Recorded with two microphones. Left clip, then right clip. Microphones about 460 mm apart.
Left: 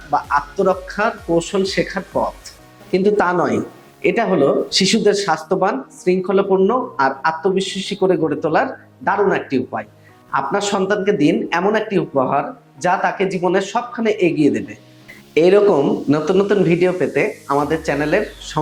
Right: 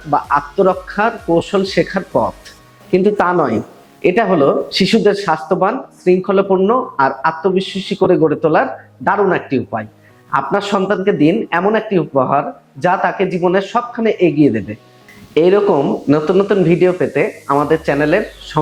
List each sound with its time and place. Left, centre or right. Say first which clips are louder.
0.1 s speech: right 3 dB; right